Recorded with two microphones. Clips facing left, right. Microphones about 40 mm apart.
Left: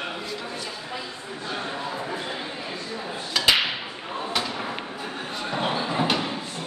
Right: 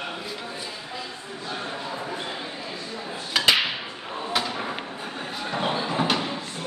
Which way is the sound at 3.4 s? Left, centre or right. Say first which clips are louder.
Right 1 dB; centre.